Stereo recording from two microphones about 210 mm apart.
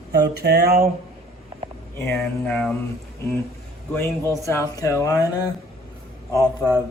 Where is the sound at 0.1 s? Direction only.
50° right (ahead or behind).